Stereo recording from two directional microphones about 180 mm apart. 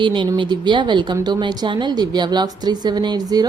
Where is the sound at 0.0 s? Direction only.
25° right (ahead or behind).